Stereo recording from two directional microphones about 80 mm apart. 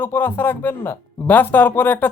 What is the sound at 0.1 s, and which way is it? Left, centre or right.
Speech, left.